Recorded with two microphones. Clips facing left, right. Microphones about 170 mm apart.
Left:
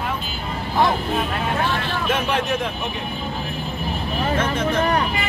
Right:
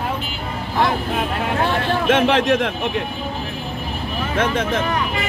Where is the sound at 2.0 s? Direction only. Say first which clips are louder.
Right 7 dB; 90° right.